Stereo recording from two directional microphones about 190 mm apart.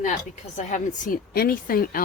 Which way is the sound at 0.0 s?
35° left (ahead or behind).